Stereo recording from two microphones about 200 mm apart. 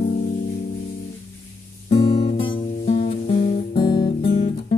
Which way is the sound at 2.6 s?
35° left (ahead or behind).